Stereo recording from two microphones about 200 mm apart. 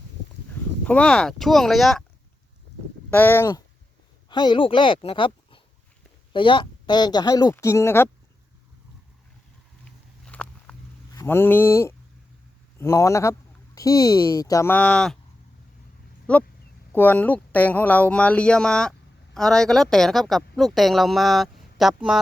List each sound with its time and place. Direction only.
0.9 s speech: 5° left (ahead or behind)
3.1 s speech: 10° left (ahead or behind)
10.2 s walk: 5° left (ahead or behind)
11.1 s a sound: 15° left (ahead or behind)
12.8 s speech: 15° left (ahead or behind)
16.3 s speech: 5° left (ahead or behind)